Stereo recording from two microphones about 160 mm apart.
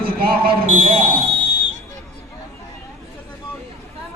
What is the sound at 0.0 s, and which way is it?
Speech, 65° right (ahead or behind).